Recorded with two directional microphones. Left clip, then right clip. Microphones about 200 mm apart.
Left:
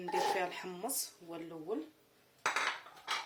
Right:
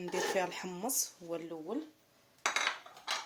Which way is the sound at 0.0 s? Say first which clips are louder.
Even; 50° right (ahead or behind).